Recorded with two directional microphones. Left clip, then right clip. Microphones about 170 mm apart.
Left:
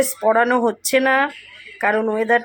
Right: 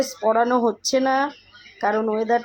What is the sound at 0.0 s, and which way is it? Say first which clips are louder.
Speech: left 3 dB; 15° left (ahead or behind).